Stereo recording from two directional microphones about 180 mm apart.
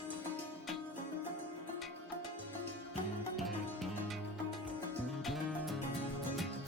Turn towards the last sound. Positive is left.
turn(degrees=0)  # may be behind; listen again after turning